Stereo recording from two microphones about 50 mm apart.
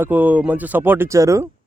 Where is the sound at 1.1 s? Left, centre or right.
Right.